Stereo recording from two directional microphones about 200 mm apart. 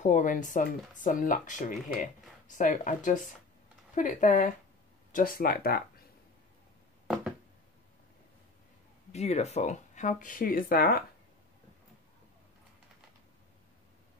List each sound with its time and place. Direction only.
0.0 s speech: 40° left (ahead or behind)
9.1 s speech: 35° left (ahead or behind)